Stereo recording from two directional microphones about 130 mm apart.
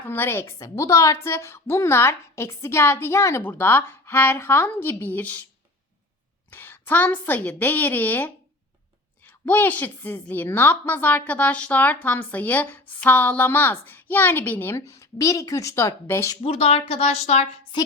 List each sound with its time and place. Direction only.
0.0 s a woman's voice: 15° left (ahead or behind)
6.5 s a woman's voice: 15° left (ahead or behind)
16.4 s speech: 50° left (ahead or behind)
17.7 s speech: 35° left (ahead or behind)